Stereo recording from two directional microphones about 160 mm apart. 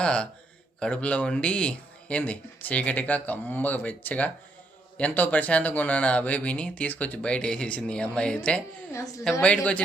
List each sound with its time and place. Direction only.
0.0 s speech: 5° left (ahead or behind)
8.9 s a woman's voice: 20° left (ahead or behind)